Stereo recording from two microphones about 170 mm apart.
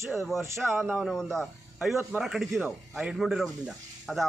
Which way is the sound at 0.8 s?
5° right (ahead or behind).